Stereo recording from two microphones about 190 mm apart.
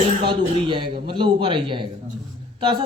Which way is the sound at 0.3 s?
25° right (ahead or behind).